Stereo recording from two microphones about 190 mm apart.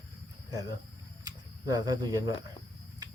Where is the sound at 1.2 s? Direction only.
20° right (ahead or behind).